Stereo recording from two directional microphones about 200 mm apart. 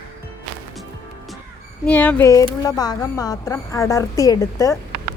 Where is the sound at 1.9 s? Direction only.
10° left (ahead or behind).